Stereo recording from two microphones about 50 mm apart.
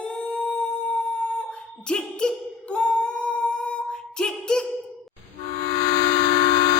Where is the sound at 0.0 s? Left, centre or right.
Centre.